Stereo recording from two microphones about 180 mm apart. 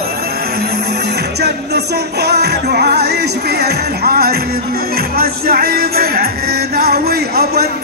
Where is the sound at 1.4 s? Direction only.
65° right (ahead or behind).